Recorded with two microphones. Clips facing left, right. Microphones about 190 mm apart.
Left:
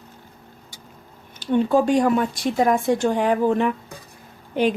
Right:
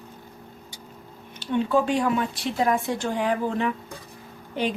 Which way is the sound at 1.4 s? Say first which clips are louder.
Left 4 dB; 45° left (ahead or behind).